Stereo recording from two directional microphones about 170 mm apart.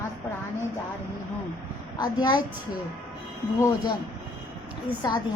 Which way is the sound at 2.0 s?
25° left (ahead or behind).